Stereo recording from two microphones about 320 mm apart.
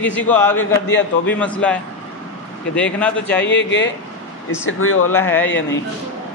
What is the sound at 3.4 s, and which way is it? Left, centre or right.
Speech, left.